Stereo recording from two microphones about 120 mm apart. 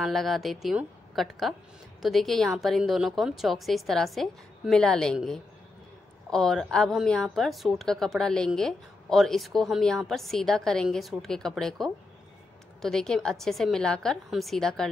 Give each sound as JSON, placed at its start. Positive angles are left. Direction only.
{"t": 0.0, "sound": "a woman's voice", "side_deg": 0}